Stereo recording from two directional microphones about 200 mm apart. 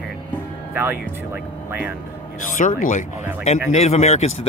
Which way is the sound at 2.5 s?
40° left (ahead or behind).